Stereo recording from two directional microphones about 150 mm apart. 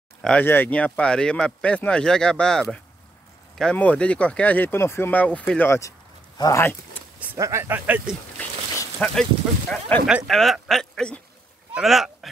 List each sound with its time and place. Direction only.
0.2 s speech: 10° left (ahead or behind)
7.3 s speech: 20° right (ahead or behind)
8.4 s a sound: 10° left (ahead or behind)
10.0 s speech: centre (ahead or behind)